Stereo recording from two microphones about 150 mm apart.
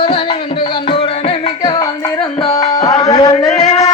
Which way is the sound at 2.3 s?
45° left (ahead or behind).